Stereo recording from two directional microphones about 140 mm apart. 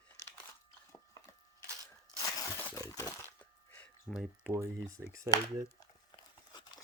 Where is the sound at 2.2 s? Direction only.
25° left (ahead or behind).